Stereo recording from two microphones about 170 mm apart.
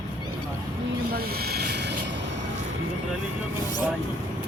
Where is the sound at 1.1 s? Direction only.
65° right (ahead or behind).